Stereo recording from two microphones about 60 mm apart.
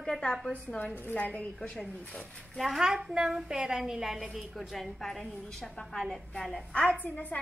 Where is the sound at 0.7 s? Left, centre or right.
Left.